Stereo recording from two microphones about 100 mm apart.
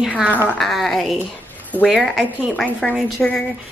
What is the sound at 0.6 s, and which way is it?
A woman's voice, centre (ahead or behind).